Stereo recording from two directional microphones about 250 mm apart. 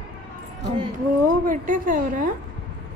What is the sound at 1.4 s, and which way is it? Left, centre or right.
Speech, right.